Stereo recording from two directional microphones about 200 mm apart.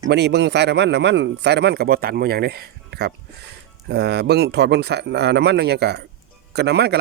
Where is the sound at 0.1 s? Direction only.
55° right (ahead or behind).